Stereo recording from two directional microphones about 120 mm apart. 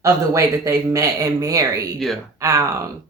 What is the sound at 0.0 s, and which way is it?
Speech, 25° right (ahead or behind).